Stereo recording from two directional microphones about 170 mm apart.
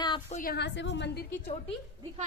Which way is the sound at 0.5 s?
90° left.